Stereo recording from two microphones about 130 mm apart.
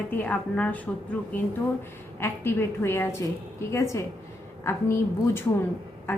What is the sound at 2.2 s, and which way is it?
A woman's voice, 20° left (ahead or behind).